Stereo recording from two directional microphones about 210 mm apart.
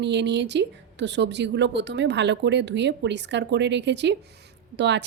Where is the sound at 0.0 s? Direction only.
55° right (ahead or behind).